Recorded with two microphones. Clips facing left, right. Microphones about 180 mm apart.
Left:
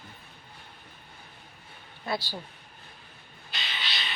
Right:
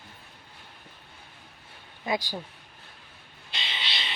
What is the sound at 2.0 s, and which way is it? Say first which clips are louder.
Speech: right 3 dB; 15° right (ahead or behind).